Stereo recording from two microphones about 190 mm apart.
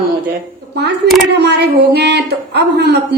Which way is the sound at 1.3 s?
60° right (ahead or behind).